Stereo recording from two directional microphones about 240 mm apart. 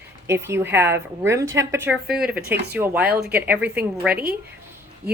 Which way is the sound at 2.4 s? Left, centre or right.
Right.